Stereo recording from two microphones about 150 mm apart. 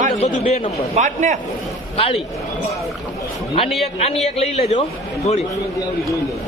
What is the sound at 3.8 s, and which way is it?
Speech, 40° left (ahead or behind).